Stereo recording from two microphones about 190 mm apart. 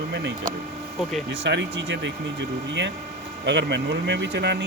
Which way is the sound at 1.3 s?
65° right (ahead or behind).